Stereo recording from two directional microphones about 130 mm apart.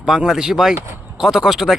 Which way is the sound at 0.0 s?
5° right (ahead or behind).